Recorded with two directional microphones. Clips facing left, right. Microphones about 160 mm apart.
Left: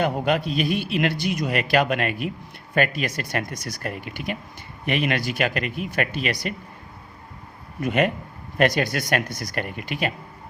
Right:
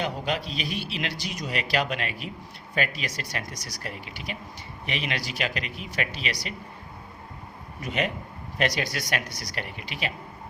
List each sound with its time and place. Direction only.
0.0 s a man's voice: 55° left (ahead or behind)
7.8 s a man's voice: 55° left (ahead or behind)